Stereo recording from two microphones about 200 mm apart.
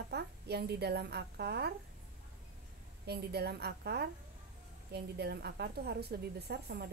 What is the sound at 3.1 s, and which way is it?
A woman's voice, 55° right (ahead or behind).